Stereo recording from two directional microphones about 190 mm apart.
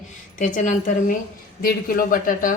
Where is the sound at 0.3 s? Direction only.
40° left (ahead or behind).